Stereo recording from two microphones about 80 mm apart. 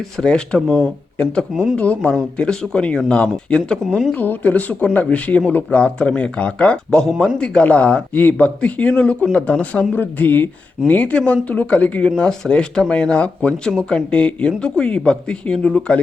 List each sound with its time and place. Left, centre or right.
0.2 s a woman's voice: centre